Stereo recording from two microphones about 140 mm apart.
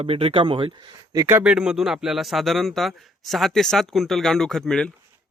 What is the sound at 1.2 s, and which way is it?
Speech, 10° right (ahead or behind).